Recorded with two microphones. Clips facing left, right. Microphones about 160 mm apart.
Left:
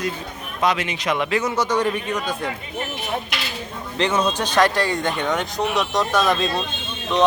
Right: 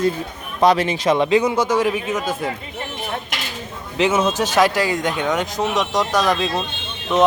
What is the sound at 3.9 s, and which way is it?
A man's voice, 5° right (ahead or behind).